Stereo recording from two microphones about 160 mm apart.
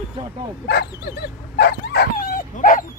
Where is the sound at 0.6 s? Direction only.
90° left.